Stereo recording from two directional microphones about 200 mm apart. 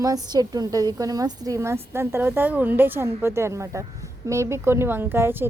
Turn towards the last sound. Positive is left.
turn(degrees=-10)  # may be behind; listen again after turning